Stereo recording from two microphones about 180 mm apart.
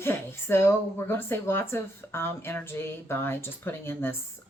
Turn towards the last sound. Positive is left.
turn(degrees=10)  # may be behind; listen again after turning